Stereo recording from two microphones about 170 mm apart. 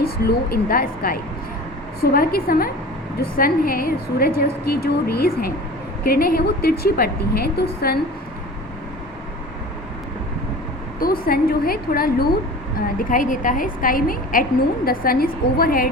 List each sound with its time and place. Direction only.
0.3 s a woman's voice: 60° left (ahead or behind)
11.0 s a woman's voice: 60° left (ahead or behind)